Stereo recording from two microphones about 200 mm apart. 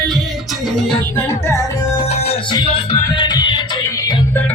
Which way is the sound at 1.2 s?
15° left (ahead or behind).